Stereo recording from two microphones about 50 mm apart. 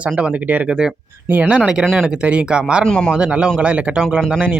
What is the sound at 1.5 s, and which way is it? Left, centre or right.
Speech, centre.